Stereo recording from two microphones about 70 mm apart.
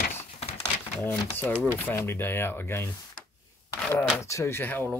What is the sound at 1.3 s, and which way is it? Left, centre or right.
Speech, left.